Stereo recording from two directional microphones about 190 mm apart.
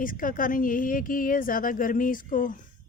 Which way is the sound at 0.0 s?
45° left (ahead or behind).